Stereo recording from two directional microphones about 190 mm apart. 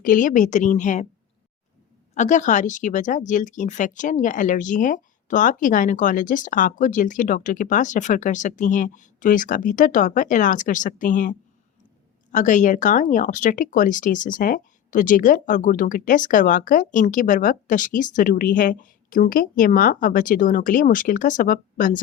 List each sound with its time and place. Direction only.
0.0 s a woman's voice: 45° left (ahead or behind)
2.1 s speech: 40° left (ahead or behind)